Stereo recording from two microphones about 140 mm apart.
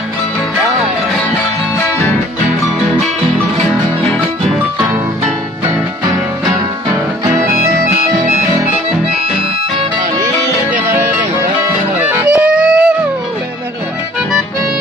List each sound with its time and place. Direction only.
7.3 s music: 20° right (ahead or behind)
12.0 s music: 10° right (ahead or behind)